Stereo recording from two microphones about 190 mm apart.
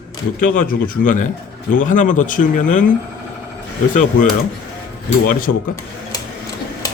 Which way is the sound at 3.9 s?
45° left (ahead or behind).